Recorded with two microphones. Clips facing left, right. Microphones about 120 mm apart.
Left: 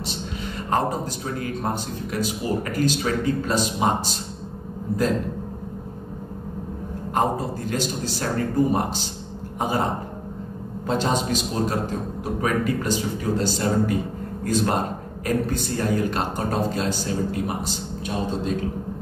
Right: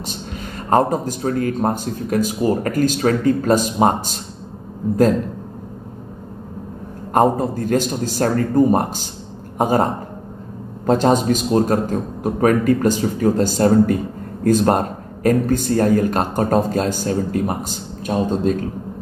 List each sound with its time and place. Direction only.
0.7 s a man's voice: 45° right (ahead or behind)
7.2 s a man's voice: 45° right (ahead or behind)
10.9 s a man's voice: 45° right (ahead or behind)